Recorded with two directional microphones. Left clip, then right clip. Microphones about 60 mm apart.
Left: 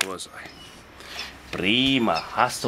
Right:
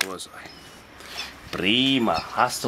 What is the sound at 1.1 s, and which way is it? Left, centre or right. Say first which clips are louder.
Speech: right 1 dB; centre.